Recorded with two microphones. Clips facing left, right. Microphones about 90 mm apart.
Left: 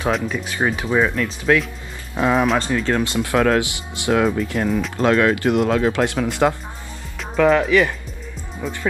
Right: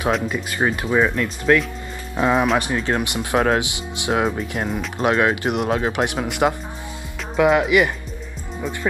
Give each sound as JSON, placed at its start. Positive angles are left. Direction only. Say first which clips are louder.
{"t": 0.1, "sound": "speech", "louder": "even", "side_deg": -5}
{"t": 2.6, "sound": "speech", "louder": "left 2 dB", "side_deg": -20}